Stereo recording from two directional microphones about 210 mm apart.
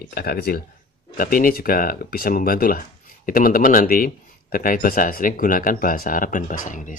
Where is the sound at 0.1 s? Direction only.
45° left (ahead or behind).